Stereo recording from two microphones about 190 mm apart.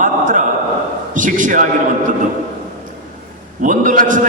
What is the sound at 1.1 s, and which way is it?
Speech, 45° right (ahead or behind).